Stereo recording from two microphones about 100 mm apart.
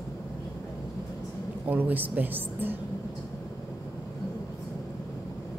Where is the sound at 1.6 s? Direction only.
15° right (ahead or behind).